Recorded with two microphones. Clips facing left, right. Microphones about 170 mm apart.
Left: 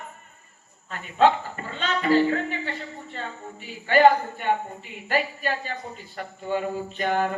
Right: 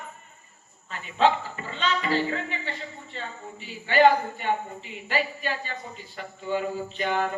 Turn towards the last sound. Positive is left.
turn(degrees=45)  # may be behind; listen again after turning